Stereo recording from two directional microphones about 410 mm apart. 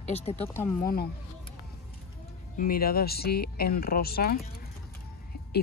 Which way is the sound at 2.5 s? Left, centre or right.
Left.